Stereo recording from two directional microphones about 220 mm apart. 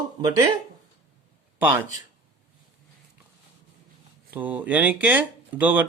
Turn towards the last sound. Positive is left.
turn(degrees=-10)  # may be behind; listen again after turning